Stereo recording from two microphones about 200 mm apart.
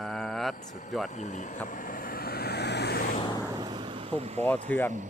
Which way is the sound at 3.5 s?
20° right (ahead or behind).